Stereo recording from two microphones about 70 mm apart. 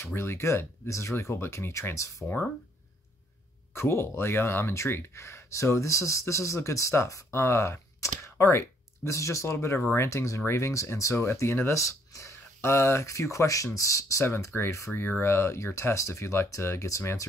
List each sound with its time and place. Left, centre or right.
0.0 s speech: left
3.7 s speech: left
14.2 s speech: left